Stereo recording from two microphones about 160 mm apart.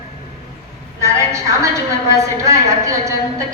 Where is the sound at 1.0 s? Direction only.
20° right (ahead or behind).